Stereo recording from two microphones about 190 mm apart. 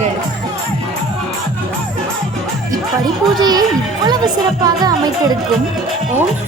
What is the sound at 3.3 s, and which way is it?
Speech, 20° right (ahead or behind).